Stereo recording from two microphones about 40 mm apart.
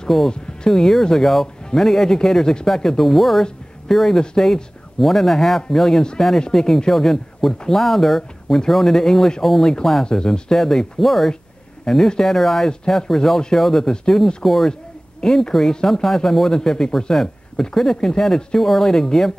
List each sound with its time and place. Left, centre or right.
0.1 s speech: centre
10.0 s speech: centre
12.6 s speech: centre
14.7 s speech: centre